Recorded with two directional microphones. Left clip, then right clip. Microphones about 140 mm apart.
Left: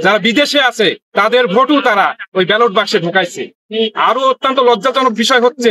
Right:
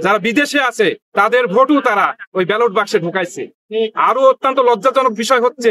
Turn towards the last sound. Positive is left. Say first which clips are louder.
# left 3 dB
turn(degrees=-40)  # may be behind; listen again after turning